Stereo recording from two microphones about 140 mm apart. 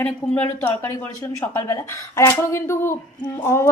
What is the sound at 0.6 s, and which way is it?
A woman's voice, 15° left (ahead or behind).